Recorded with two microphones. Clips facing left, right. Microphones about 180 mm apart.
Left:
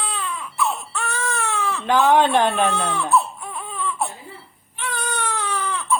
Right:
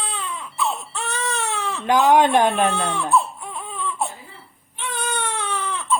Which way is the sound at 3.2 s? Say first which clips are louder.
Even; 20° right (ahead or behind).